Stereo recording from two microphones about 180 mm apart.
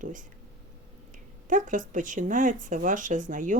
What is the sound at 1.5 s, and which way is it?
Speech, 45° right (ahead or behind).